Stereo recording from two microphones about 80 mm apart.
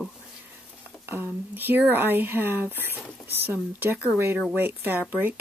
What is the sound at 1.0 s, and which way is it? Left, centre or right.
Speech, right.